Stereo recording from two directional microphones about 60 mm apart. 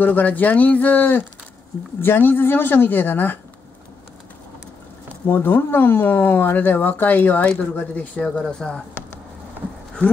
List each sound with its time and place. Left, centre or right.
0.0 s speech: left
5.2 s speech: left; by 9.0 s centre